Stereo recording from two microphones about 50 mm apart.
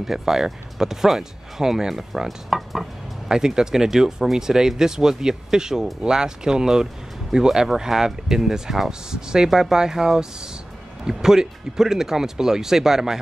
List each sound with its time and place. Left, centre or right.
0.0 s speech: centre